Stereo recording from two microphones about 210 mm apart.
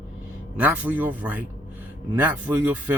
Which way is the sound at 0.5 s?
5° right (ahead or behind).